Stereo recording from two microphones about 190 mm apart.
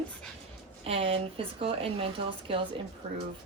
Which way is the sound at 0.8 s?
30° right (ahead or behind).